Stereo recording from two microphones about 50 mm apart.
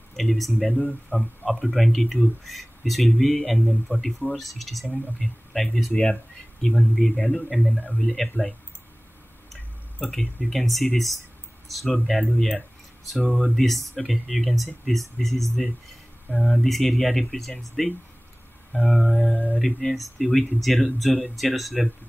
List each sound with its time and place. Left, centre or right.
0.1 s speech: centre
7.7 s speech: left
8.0 s speech: centre
10.1 s speech: centre
19.3 s speech: left
19.6 s speech: centre